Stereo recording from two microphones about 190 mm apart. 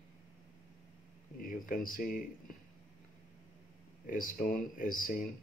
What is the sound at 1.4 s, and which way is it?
Speech, 45° left (ahead or behind).